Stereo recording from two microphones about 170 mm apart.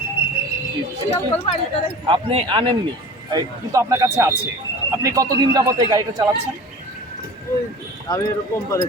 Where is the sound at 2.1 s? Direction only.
30° right (ahead or behind).